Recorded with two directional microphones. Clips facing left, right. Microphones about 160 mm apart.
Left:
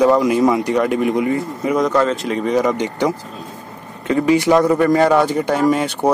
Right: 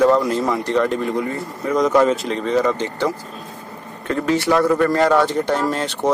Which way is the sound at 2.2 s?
10° left (ahead or behind).